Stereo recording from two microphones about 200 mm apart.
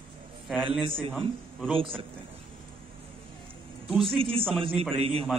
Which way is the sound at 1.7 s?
25° right (ahead or behind).